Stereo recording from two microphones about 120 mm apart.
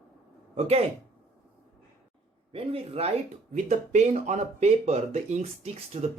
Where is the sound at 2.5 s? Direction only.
55° right (ahead or behind).